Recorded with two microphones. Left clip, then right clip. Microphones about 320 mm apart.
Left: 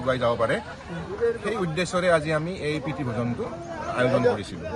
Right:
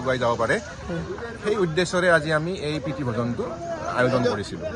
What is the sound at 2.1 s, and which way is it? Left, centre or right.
Speech, centre.